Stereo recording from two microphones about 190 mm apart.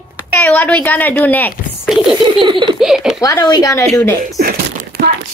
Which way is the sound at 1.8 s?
Centre (ahead or behind).